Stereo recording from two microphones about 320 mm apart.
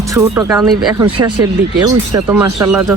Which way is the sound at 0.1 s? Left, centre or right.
Centre.